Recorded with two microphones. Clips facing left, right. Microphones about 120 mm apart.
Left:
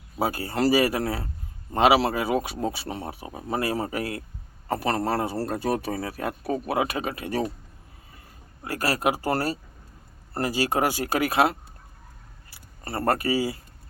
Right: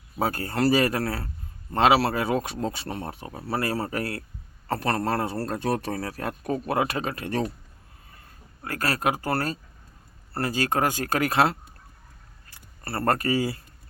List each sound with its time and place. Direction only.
0.2 s speech: 5° left (ahead or behind)
0.9 s speech: 20° left (ahead or behind)
8.6 s speech: 10° left (ahead or behind)
12.8 s speech: 15° left (ahead or behind)